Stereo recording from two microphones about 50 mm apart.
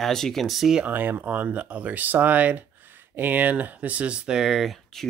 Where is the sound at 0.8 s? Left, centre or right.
Right.